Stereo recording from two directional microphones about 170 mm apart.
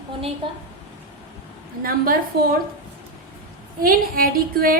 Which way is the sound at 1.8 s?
60° right (ahead or behind).